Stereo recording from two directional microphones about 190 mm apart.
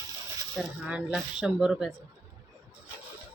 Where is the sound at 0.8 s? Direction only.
5° right (ahead or behind).